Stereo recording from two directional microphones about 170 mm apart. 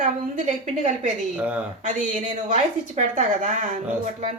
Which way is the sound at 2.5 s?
50° right (ahead or behind).